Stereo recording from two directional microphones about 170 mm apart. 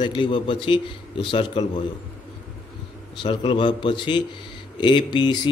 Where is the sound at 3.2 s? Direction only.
30° left (ahead or behind).